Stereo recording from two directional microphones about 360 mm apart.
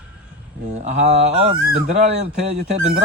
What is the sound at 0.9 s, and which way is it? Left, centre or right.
Speech, centre.